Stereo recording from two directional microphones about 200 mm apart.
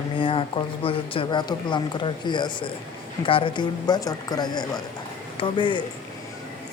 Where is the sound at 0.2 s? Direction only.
25° left (ahead or behind).